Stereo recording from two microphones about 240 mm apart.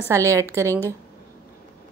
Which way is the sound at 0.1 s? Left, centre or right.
Centre.